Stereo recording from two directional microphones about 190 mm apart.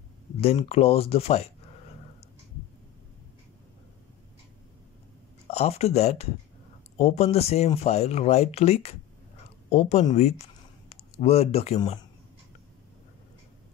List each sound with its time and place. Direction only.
0.4 s speech: 35° left (ahead or behind)
5.5 s speech: 35° left (ahead or behind)